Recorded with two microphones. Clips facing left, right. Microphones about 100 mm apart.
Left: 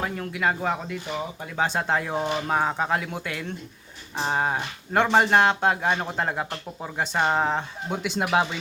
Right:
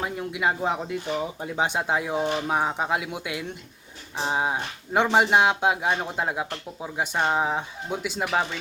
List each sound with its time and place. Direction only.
0.0 s speech: 15° right (ahead or behind)
7.2 s speech: centre (ahead or behind)
8.2 s speech: 5° left (ahead or behind)